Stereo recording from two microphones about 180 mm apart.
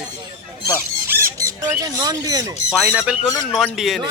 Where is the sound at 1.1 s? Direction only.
15° right (ahead or behind).